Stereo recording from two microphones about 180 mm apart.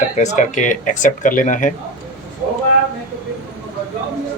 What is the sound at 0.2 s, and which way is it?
Speech, 45° left (ahead or behind).